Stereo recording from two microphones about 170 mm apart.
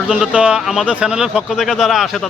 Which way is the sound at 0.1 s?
5° right (ahead or behind).